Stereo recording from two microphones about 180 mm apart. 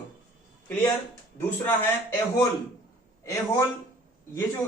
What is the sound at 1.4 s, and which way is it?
Speech, 10° left (ahead or behind).